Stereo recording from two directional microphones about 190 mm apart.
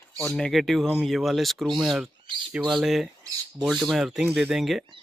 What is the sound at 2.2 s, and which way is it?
Speech, 25° right (ahead or behind).